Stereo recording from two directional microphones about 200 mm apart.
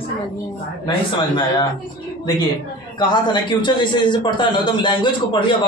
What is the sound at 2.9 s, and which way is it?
A man's voice, 20° left (ahead or behind).